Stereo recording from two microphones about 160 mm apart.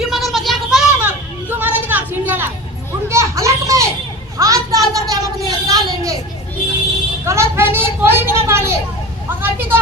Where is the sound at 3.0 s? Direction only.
20° right (ahead or behind).